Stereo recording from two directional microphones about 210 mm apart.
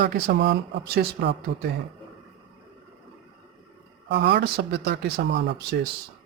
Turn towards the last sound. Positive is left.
turn(degrees=-55)  # may be behind; listen again after turning